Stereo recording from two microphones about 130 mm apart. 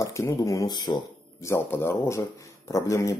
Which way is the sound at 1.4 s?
20° left (ahead or behind).